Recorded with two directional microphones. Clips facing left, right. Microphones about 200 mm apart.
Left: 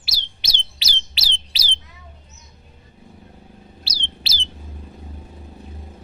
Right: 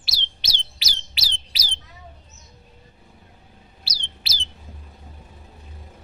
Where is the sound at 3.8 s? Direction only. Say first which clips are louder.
Left 3 dB; 25° left (ahead or behind).